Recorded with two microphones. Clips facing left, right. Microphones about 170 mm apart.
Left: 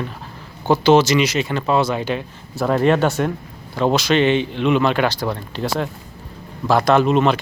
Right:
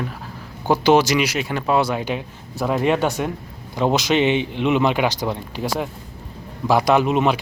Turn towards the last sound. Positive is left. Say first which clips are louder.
# left 2 dB
turn(degrees=-15)  # may be behind; listen again after turning